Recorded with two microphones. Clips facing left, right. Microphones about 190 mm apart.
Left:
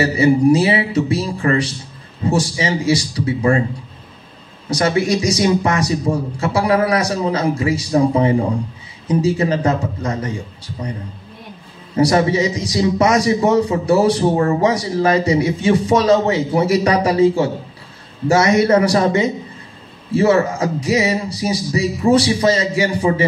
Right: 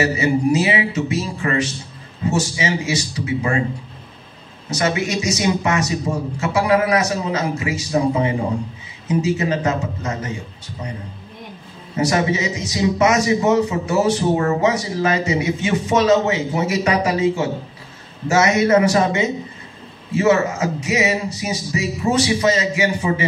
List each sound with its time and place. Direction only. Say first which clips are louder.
0.0 s a man's voice: left 4 dB; 30° left (ahead or behind)
4.6 s a man's voice: left 4 dB; 35° left (ahead or behind)
11.9 s a man's voice: left 4 dB; 30° left (ahead or behind)